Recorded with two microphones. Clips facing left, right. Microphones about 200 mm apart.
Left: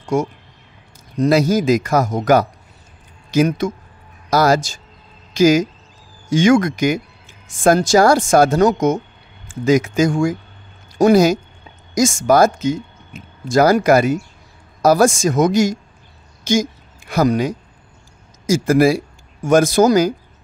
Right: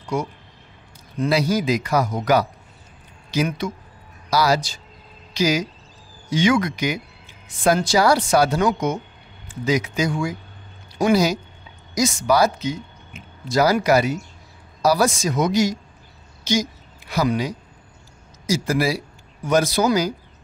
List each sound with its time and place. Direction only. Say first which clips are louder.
0.0 s a man's voice: left 6 dB; 45° left (ahead or behind)